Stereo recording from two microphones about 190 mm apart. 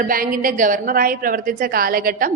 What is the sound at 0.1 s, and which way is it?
A woman's voice, 50° right (ahead or behind).